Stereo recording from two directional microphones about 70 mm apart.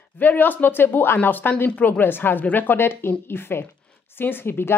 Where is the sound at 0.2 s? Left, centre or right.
Left.